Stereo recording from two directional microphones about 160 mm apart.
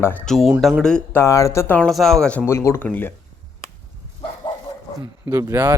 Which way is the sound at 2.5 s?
15° left (ahead or behind).